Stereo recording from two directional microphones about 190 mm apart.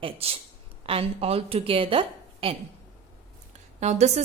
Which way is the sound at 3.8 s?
35° right (ahead or behind).